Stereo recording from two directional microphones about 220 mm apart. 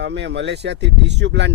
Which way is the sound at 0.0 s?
50° right (ahead or behind).